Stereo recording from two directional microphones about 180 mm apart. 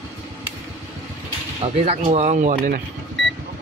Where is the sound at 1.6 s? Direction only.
35° right (ahead or behind).